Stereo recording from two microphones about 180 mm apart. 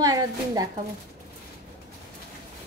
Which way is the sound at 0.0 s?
20° right (ahead or behind).